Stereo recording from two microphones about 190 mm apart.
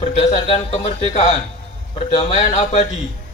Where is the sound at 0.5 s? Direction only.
30° left (ahead or behind).